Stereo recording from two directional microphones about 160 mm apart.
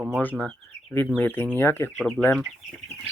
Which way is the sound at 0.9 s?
10° left (ahead or behind).